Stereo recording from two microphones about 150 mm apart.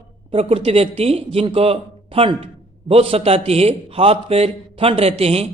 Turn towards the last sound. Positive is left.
turn(degrees=-40)  # may be behind; listen again after turning